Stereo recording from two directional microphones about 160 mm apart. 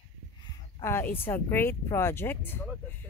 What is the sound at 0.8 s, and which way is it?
Speech, 15° left (ahead or behind).